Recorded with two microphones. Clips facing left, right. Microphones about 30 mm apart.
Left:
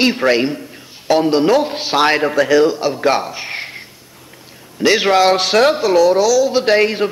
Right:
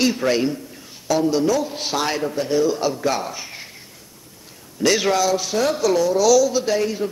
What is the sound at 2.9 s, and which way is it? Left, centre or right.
Speech, left.